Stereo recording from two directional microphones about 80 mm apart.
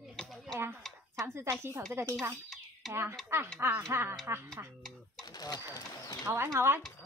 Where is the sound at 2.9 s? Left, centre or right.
Right.